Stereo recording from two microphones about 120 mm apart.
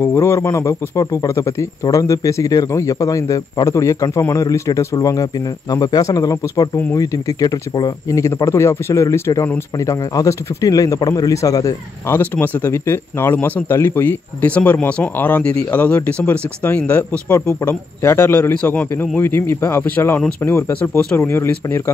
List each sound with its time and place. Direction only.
0.0 s a man's voice: 20° left (ahead or behind)
12.2 s a man's voice: 15° left (ahead or behind)